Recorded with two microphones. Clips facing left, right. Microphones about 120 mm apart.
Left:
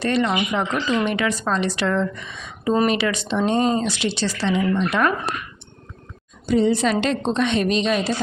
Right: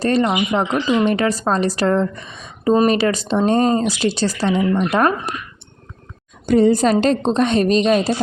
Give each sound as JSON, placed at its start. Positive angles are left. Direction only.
{"t": 0.0, "sound": "speech", "side_deg": -40}
{"t": 0.6, "sound": "speech", "side_deg": -20}
{"t": 1.0, "sound": "speech", "side_deg": -40}
{"t": 6.4, "sound": "speech", "side_deg": -55}